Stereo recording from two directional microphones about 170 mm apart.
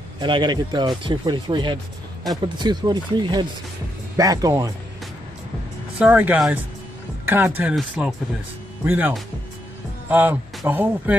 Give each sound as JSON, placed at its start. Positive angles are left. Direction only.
{"t": 0.2, "sound": "speech", "side_deg": -25}
{"t": 5.9, "sound": "speech", "side_deg": -10}